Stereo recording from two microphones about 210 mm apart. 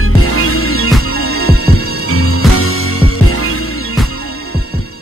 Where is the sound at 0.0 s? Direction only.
90° left.